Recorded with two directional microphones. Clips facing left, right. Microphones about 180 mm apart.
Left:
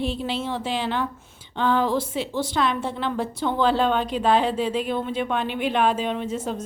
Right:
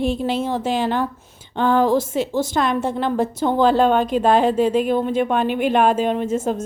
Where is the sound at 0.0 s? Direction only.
45° right (ahead or behind).